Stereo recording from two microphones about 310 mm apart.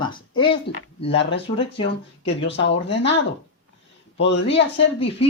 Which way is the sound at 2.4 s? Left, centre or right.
Left.